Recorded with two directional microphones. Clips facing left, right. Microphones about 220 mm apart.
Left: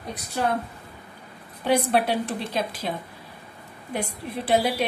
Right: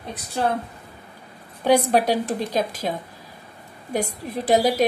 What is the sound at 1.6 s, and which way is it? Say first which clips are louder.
A woman's voice: right 4 dB; 40° right (ahead or behind).